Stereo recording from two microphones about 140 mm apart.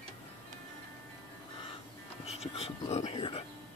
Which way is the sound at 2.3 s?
50° left (ahead or behind).